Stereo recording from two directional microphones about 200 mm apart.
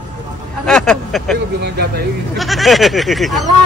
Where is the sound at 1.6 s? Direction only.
55° right (ahead or behind).